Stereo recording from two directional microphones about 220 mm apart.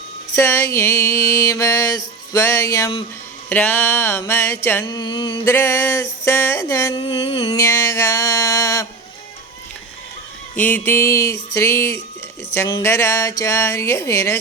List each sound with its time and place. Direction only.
0.3 s mantra: 15° left (ahead or behind)
7.0 s a sound: 25° left (ahead or behind)
7.6 s mantra: 15° left (ahead or behind)
10.6 s mantra: 10° left (ahead or behind)